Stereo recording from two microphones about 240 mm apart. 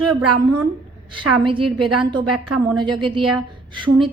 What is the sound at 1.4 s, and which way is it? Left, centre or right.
A woman's voice, right.